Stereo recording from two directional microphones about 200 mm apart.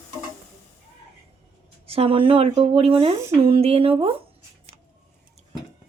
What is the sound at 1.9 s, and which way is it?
Speech, 30° right (ahead or behind).